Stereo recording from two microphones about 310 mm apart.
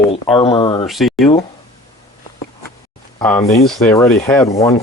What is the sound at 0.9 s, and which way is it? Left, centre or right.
Speech, centre.